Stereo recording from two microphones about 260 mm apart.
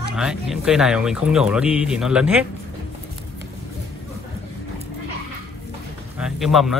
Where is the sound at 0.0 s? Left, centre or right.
Centre.